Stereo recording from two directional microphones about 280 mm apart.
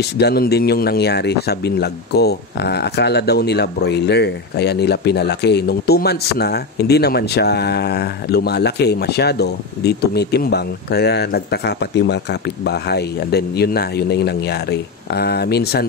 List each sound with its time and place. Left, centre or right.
0.0 s speech: left